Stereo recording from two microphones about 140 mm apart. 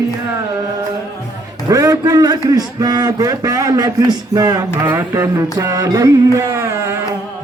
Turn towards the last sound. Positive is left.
turn(degrees=-20)  # may be behind; listen again after turning